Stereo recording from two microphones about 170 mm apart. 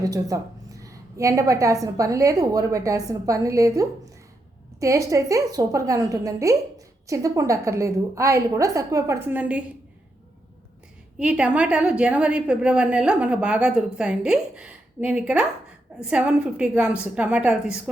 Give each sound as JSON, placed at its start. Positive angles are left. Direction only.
{"t": 0.0, "sound": "a woman's voice", "side_deg": -20}
{"t": 11.2, "sound": "a woman's voice", "side_deg": -5}